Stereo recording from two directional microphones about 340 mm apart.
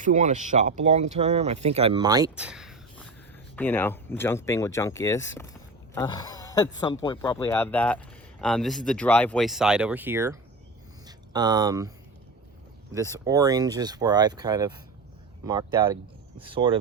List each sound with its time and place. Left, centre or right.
0.0 s speech: right
11.0 s a sound: centre
12.9 s speech: centre